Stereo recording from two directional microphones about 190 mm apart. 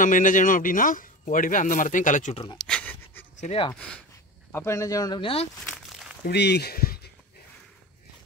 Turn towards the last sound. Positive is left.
turn(degrees=50)  # may be behind; listen again after turning